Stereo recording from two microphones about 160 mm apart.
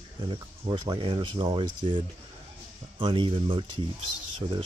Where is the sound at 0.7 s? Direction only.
30° right (ahead or behind).